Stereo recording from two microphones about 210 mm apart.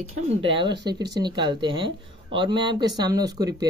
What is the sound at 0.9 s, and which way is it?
Speech, 20° right (ahead or behind).